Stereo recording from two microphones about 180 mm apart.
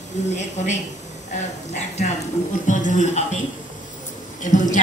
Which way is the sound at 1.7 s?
40° left (ahead or behind).